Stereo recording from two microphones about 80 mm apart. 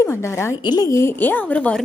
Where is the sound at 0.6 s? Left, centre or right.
Left.